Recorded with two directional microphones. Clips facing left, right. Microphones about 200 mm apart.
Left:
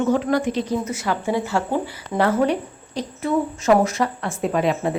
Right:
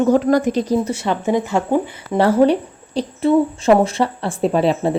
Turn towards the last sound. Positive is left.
turn(degrees=-30)  # may be behind; listen again after turning